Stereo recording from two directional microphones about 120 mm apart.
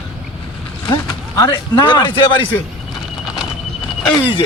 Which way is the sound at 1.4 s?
35° left (ahead or behind).